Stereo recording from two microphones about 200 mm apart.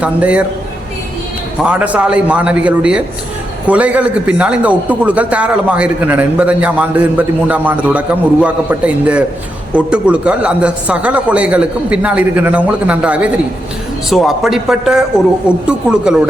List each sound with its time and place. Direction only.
0.0 s a man's voice: 5° right (ahead or behind)
1.6 s a man's voice: 5° right (ahead or behind)